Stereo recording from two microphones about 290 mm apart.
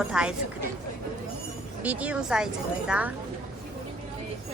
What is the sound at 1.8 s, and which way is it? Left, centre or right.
Speech, centre.